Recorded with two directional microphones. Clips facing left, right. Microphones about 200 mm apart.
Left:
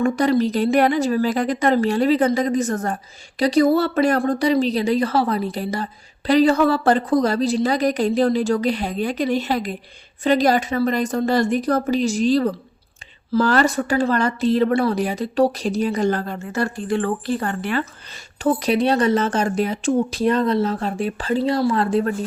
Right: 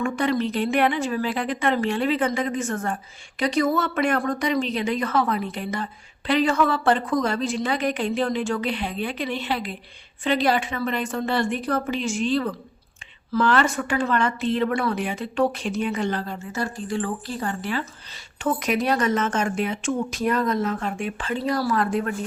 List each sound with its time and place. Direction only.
0.0 s a woman's voice: 35° left (ahead or behind); by 18.2 s 60° left (ahead or behind)
18.3 s a woman's voice: 35° left (ahead or behind)